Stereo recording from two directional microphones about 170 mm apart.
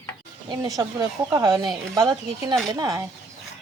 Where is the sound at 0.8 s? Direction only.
20° right (ahead or behind).